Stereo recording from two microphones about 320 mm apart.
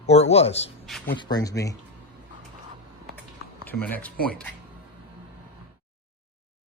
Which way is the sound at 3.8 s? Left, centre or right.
Centre.